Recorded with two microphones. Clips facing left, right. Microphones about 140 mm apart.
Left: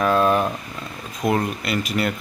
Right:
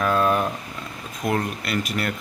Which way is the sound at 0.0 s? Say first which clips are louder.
Left 3 dB; 5° left (ahead or behind).